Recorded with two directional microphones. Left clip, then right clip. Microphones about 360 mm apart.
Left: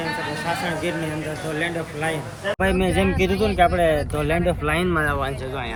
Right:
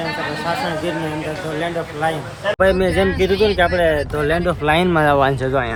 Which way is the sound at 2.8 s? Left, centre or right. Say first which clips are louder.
Right 5 dB; centre.